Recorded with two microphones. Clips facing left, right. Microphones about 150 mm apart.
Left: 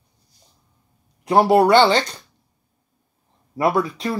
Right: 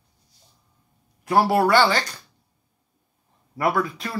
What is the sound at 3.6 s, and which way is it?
Speech, 25° left (ahead or behind).